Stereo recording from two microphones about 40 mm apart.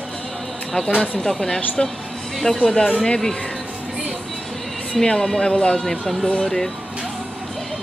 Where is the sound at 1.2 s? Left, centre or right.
Centre.